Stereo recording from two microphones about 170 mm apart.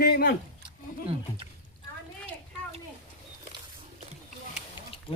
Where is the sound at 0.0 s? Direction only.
65° left (ahead or behind).